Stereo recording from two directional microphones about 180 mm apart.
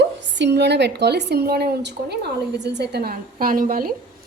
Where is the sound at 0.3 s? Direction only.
70° right (ahead or behind); by 3.9 s 50° right (ahead or behind).